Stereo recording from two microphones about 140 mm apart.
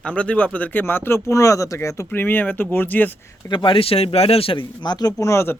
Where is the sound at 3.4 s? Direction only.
35° left (ahead or behind).